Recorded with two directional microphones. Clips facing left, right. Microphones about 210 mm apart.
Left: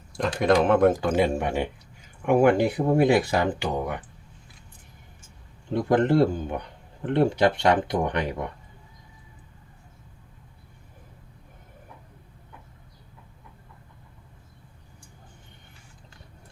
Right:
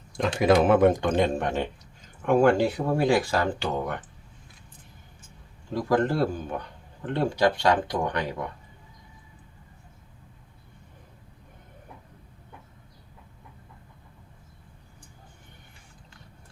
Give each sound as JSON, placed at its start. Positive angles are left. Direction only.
{"t": 0.3, "sound": "speech", "side_deg": -5}
{"t": 5.7, "sound": "speech", "side_deg": 20}